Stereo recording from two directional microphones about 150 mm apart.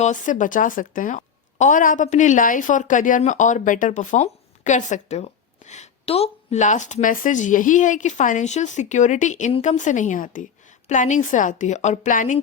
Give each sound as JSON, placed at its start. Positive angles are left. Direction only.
{"t": 0.0, "sound": "a woman's voice", "side_deg": 55}